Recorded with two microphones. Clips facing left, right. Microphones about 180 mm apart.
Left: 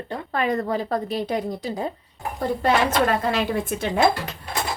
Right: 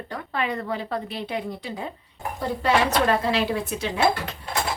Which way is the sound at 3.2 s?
50° left (ahead or behind).